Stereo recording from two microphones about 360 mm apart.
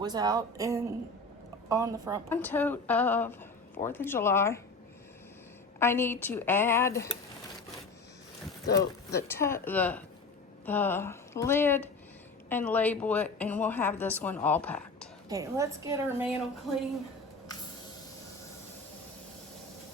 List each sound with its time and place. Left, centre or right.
0.0 s a woman's voice: centre
2.3 s a woman's voice: centre
5.8 s a woman's voice: centre
9.3 s speech: centre
15.3 s a woman's voice: centre